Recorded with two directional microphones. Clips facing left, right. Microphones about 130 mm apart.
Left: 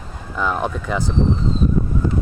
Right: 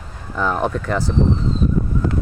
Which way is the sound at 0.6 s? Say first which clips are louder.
Right 3 dB; 10° left (ahead or behind).